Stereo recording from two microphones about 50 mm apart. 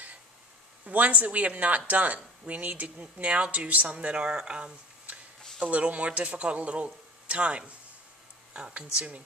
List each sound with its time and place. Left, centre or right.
0.8 s speech: right